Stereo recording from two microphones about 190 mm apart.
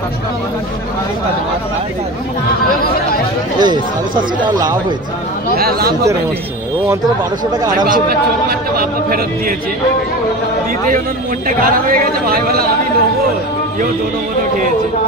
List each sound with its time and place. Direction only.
3.5 s a man's voice: 25° right (ahead or behind)
5.6 s a man's voice: 55° right (ahead or behind)
7.9 s a man's voice: 50° right (ahead or behind)
11.4 s a man's voice: 50° right (ahead or behind)